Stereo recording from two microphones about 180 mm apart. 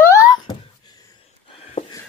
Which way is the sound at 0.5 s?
20° left (ahead or behind).